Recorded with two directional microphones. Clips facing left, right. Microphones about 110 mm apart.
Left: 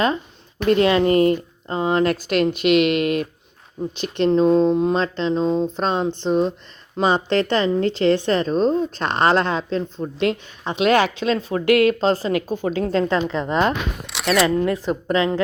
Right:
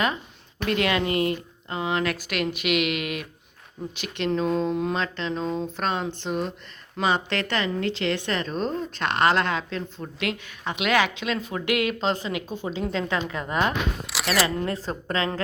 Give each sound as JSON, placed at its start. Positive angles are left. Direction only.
{"t": 0.6, "sound": "speech", "side_deg": 35}
{"t": 13.1, "sound": "a woman's voice", "side_deg": 25}
{"t": 14.1, "sound": "speech", "side_deg": 0}
{"t": 14.8, "sound": "a woman's voice", "side_deg": 20}